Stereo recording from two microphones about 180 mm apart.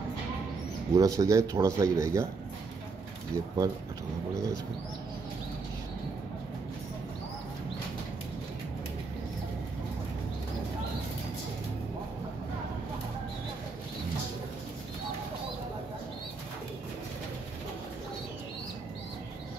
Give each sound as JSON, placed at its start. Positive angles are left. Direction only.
{"t": 0.9, "sound": "speech", "side_deg": -20}
{"t": 3.3, "sound": "speech", "side_deg": -20}